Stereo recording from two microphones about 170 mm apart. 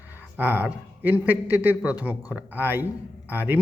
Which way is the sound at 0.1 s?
10° right (ahead or behind).